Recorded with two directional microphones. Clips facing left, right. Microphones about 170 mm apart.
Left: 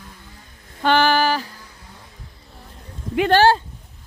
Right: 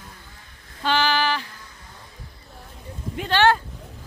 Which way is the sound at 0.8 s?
55° left (ahead or behind).